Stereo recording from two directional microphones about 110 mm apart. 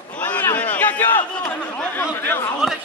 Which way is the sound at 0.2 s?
15° left (ahead or behind).